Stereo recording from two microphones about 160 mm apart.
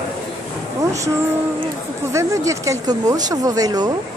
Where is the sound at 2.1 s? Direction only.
20° right (ahead or behind).